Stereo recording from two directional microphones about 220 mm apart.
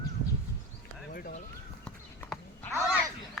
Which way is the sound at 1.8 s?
5° left (ahead or behind).